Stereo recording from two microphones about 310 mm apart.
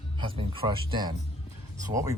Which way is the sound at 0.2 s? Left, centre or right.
Centre.